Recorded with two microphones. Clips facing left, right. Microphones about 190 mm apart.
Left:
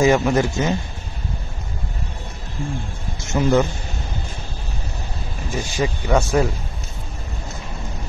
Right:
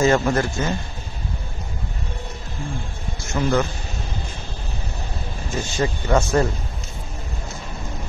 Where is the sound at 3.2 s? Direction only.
20° left (ahead or behind).